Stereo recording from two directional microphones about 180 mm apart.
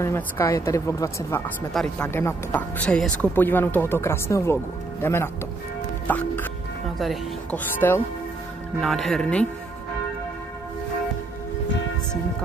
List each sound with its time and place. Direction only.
0.0 s speech: 15° left (ahead or behind)
1.7 s speech: centre (ahead or behind)
2.0 s speech: 15° left (ahead or behind)
7.8 s speech: 15° left (ahead or behind)
8.8 s speech: centre (ahead or behind)